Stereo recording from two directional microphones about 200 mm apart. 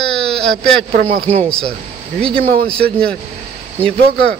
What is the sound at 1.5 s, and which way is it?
Speech, 5° left (ahead or behind).